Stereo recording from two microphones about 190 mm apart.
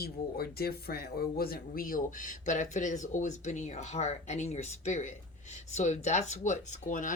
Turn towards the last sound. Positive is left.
turn(degrees=45)  # may be behind; listen again after turning